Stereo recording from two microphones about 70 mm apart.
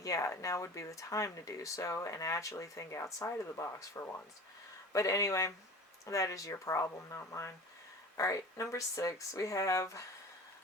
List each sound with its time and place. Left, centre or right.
0.0 s speech: left